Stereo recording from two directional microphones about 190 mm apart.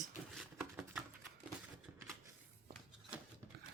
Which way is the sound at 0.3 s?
Centre (ahead or behind).